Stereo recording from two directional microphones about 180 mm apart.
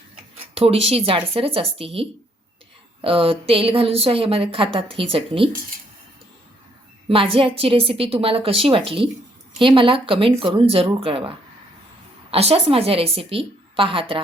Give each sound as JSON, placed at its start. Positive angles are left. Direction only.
{"t": 0.5, "sound": "a woman's voice", "side_deg": -35}
{"t": 7.1, "sound": "a woman's voice", "side_deg": -30}